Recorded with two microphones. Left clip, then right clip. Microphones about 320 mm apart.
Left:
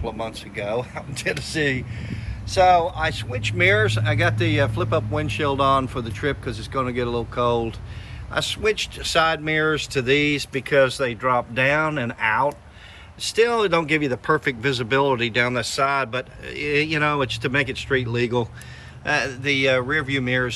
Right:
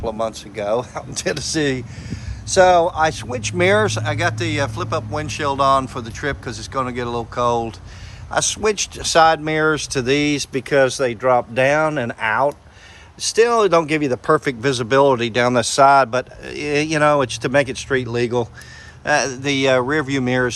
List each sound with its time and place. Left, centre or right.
0.0 s speech: centre